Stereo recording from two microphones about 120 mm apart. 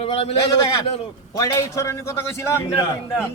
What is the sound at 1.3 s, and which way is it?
A man's voice, 25° left (ahead or behind).